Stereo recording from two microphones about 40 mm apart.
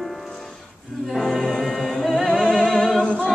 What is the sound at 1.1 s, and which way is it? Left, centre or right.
A capella, centre.